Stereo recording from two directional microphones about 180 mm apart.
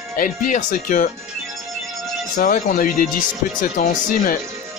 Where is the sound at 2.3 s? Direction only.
50° left (ahead or behind).